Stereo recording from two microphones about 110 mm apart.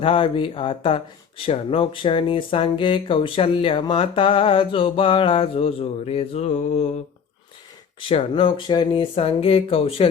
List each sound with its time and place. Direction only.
0.0 s speech: 55° left (ahead or behind); by 6.8 s 75° left (ahead or behind)
8.3 s speech: 50° left (ahead or behind)